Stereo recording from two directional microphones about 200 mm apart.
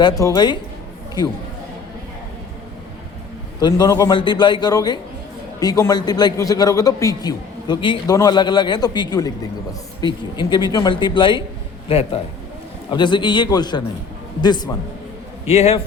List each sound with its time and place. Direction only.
0.0 s a man's voice: 20° left (ahead or behind)
3.6 s a man's voice: 20° left (ahead or behind)
15.4 s a man's voice: 30° left (ahead or behind)